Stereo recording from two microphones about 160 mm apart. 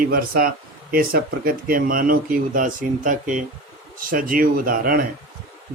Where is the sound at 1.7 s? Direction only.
60° right (ahead or behind).